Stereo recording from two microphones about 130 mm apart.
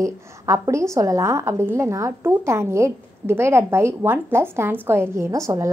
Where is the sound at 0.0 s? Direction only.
25° right (ahead or behind).